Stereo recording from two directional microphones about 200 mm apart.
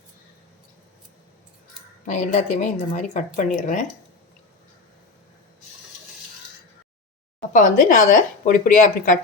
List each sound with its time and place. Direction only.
2.0 s speech: 40° left (ahead or behind)
7.5 s speech: 40° left (ahead or behind)